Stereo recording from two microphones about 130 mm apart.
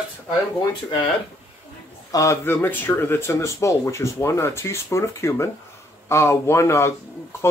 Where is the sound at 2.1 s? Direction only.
20° left (ahead or behind).